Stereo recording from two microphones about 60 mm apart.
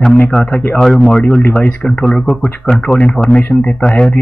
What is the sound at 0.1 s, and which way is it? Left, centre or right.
Speech, left.